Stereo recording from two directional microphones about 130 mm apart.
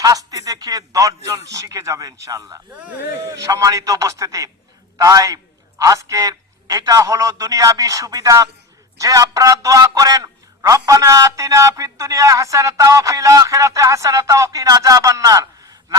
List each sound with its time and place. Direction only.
0.0 s a man's voice: 25° right (ahead or behind)